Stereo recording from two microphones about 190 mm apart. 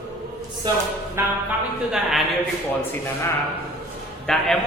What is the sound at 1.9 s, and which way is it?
Speech, centre (ahead or behind).